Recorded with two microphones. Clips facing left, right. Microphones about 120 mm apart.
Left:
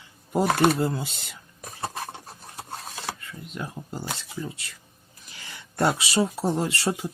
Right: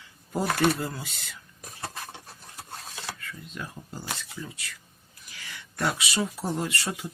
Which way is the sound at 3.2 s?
20° left (ahead or behind).